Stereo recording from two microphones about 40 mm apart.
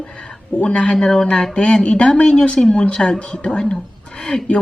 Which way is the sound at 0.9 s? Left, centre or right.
Centre.